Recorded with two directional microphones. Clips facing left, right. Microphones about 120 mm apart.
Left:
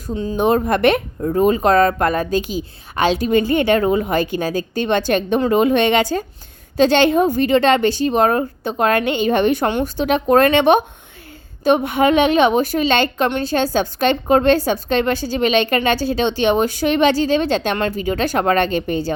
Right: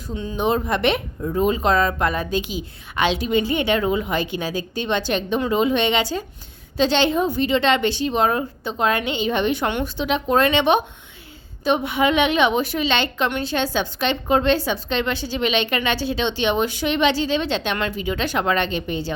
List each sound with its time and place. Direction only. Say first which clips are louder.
0.1 s speech: left 5 dB; 35° left (ahead or behind)